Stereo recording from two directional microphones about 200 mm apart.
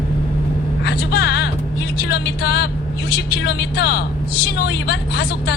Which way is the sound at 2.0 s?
55° left (ahead or behind).